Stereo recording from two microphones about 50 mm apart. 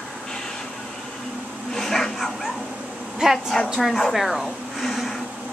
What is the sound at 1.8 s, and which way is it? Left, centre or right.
Bow-wow, centre.